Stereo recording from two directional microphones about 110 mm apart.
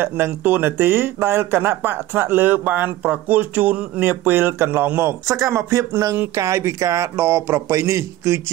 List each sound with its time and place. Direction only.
0.0 s speech: 20° right (ahead or behind)